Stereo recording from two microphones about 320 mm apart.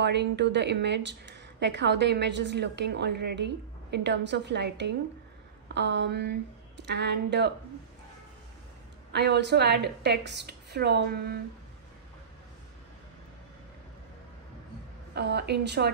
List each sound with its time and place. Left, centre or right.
0.0 s speech: right
9.1 s speech: right
15.1 s speech: right